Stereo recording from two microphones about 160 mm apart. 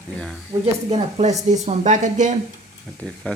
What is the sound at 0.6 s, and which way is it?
Speech, 40° right (ahead or behind).